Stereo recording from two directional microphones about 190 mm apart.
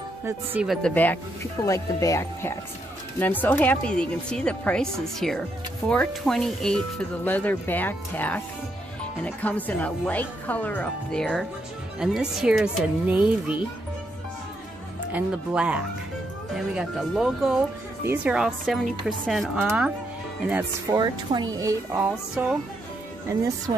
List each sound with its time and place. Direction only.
0.2 s speech: 10° right (ahead or behind)
0.8 s speech: 10° left (ahead or behind); by 13.6 s 5° right (ahead or behind)
15.1 s speech: 5° right (ahead or behind)
20.9 s speech: 20° right (ahead or behind); by 22.6 s 5° right (ahead or behind)